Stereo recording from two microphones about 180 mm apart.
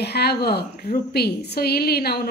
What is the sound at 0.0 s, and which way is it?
A woman's voice, 65° left (ahead or behind).